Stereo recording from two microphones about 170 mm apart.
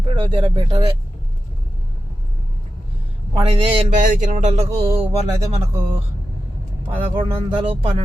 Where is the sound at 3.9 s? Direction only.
50° right (ahead or behind).